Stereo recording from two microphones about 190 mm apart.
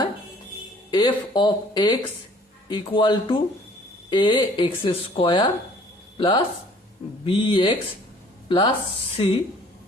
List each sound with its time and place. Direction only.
0.9 s speech: 20° left (ahead or behind)